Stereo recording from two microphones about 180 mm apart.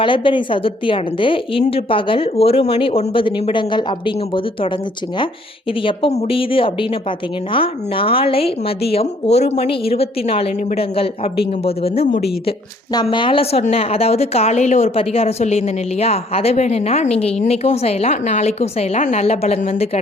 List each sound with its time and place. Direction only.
0.0 s a woman's voice: 30° left (ahead or behind)
5.8 s a woman's voice: 35° left (ahead or behind)